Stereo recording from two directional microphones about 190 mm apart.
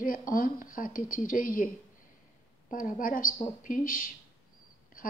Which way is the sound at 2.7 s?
45° left (ahead or behind).